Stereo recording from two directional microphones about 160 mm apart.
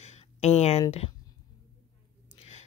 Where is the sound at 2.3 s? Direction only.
35° left (ahead or behind).